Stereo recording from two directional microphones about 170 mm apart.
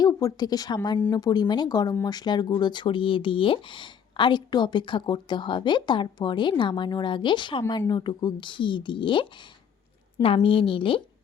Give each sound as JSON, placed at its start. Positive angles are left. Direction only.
{"t": 0.0, "sound": "a woman's voice", "side_deg": 20}